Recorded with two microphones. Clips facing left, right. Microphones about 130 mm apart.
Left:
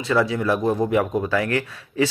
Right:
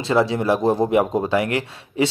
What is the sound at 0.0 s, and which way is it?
Speech, 30° right (ahead or behind).